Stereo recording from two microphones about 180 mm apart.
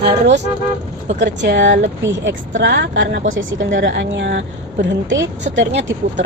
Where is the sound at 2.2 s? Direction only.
90° right.